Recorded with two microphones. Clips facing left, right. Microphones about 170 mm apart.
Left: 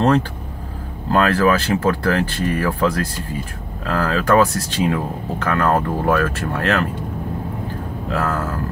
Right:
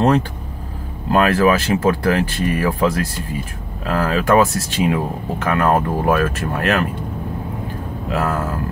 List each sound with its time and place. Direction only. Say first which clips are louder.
1.1 s speech: right 1 dB; 15° right (ahead or behind)
8.1 s speech: right 1 dB; 15° right (ahead or behind)